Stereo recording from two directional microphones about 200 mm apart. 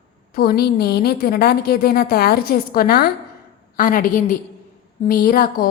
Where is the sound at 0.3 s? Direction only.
50° left (ahead or behind).